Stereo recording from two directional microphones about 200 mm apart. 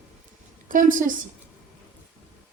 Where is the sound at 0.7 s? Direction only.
40° right (ahead or behind).